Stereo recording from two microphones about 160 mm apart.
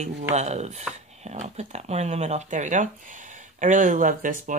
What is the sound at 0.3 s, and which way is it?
Speech, 45° right (ahead or behind).